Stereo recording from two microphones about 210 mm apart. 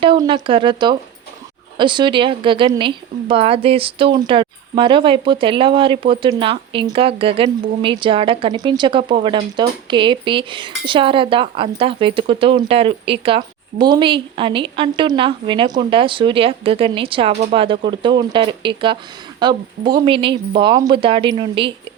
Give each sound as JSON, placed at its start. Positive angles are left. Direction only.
{"t": 0.0, "sound": "speech", "side_deg": -25}